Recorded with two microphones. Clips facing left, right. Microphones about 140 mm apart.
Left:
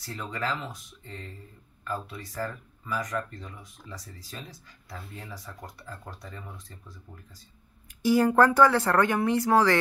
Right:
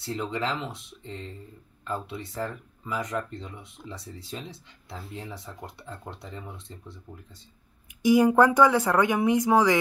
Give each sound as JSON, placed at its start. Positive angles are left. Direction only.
{"t": 0.0, "sound": "speech", "side_deg": -25}
{"t": 8.0, "sound": "speech", "side_deg": -15}